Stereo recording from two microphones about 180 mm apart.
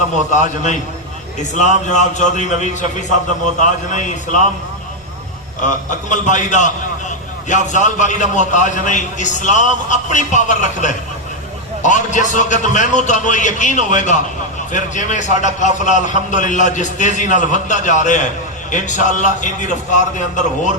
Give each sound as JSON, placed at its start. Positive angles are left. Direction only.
{"t": 0.3, "sound": "a man's voice", "side_deg": 45}
{"t": 3.9, "sound": "a man's voice", "side_deg": 45}
{"t": 5.6, "sound": "a man's voice", "side_deg": 45}